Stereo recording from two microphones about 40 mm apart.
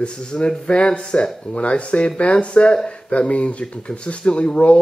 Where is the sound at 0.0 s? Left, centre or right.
Left.